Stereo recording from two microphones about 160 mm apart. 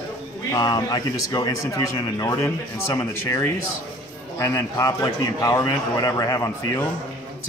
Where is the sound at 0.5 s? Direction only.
25° left (ahead or behind).